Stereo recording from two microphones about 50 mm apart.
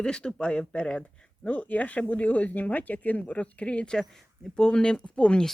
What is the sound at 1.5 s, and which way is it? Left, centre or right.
Speech, left.